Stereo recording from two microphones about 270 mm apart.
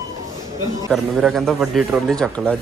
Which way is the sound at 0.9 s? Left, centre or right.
Centre.